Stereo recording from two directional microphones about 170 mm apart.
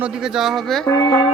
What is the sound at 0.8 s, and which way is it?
Speech, 20° left (ahead or behind).